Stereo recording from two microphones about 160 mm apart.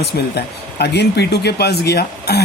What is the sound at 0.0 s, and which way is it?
A man's voice, 90° left.